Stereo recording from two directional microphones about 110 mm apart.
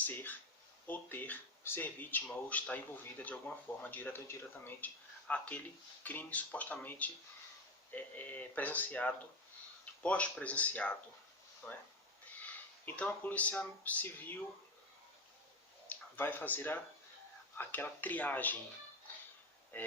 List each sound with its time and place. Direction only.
0.0 s speech: 15° left (ahead or behind)
15.9 s speech: 20° left (ahead or behind)
19.7 s speech: 15° left (ahead or behind)